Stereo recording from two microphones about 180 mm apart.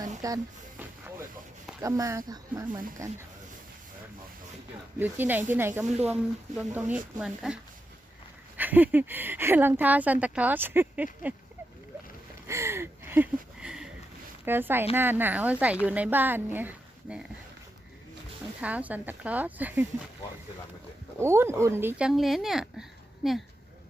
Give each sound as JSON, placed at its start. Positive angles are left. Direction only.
{"t": 0.2, "sound": "speech", "side_deg": -20}
{"t": 1.8, "sound": "speech", "side_deg": -15}
{"t": 4.9, "sound": "speech", "side_deg": -10}
{"t": 12.5, "sound": "a sound", "side_deg": -15}
{"t": 14.4, "sound": "speech", "side_deg": -10}
{"t": 18.6, "sound": "speech", "side_deg": -10}
{"t": 21.2, "sound": "speech", "side_deg": -15}